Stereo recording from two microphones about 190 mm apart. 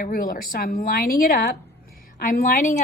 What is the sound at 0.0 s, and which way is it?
A woman's voice, 50° left (ahead or behind).